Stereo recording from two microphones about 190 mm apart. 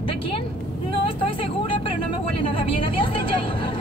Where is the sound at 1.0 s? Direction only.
30° left (ahead or behind).